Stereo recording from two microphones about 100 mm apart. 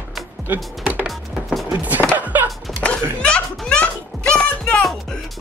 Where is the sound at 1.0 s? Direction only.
Centre (ahead or behind).